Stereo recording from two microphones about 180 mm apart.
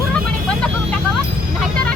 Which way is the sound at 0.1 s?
5° left (ahead or behind).